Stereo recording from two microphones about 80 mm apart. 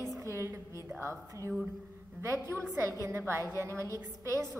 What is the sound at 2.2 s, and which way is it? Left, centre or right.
A woman's voice, right.